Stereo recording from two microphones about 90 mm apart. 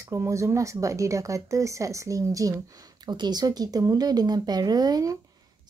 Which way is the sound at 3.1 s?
50° right (ahead or behind).